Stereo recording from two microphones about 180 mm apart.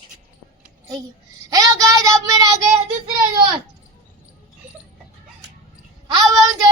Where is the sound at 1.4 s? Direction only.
20° right (ahead or behind).